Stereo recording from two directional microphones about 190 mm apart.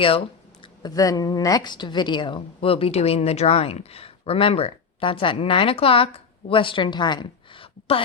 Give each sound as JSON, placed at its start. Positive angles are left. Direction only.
{"t": 0.0, "sound": "speech", "side_deg": 30}